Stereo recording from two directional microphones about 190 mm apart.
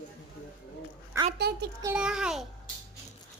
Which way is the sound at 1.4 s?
60° right (ahead or behind).